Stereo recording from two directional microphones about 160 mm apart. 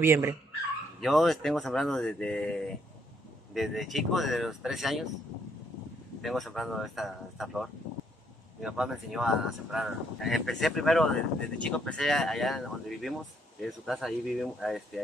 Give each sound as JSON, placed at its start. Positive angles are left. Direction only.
{"t": 0.0, "sound": "speech", "side_deg": -15}
{"t": 1.0, "sound": "speech", "side_deg": 0}
{"t": 6.2, "sound": "speech", "side_deg": 0}